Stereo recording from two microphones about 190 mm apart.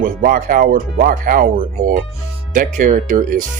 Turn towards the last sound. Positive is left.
turn(degrees=-45)  # may be behind; listen again after turning